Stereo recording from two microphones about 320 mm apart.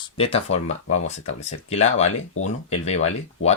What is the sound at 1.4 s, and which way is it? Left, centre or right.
Speech, centre.